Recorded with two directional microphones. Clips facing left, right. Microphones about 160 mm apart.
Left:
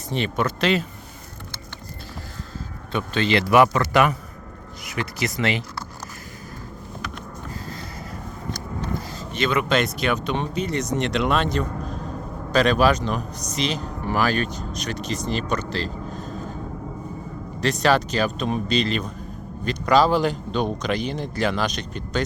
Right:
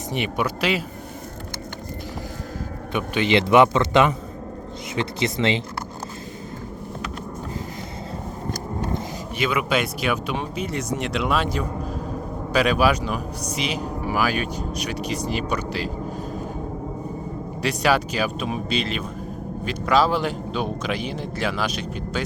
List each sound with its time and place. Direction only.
0.1 s speech: 10° right (ahead or behind)
2.9 s a man's voice: 15° right (ahead or behind)
9.4 s a man's voice: 10° right (ahead or behind)
17.6 s a man's voice: 10° right (ahead or behind)